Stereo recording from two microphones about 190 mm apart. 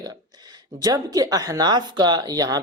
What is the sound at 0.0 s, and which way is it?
Speech, 20° right (ahead or behind).